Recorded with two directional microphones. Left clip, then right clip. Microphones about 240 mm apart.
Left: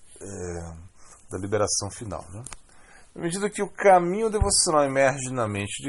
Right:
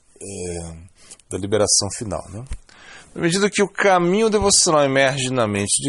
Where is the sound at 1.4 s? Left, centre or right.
Right.